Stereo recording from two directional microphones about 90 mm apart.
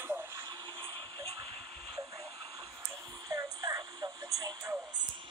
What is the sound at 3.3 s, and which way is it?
Radio, 40° right (ahead or behind).